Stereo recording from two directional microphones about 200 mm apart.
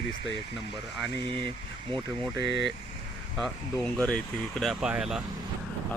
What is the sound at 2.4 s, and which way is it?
Speech, 60° left (ahead or behind).